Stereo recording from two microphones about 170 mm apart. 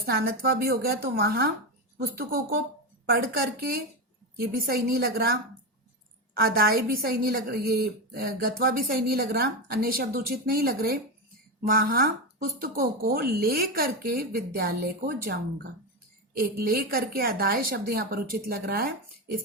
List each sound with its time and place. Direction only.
0.0 s a woman's voice: 70° right (ahead or behind)
4.4 s a woman's voice: 60° right (ahead or behind)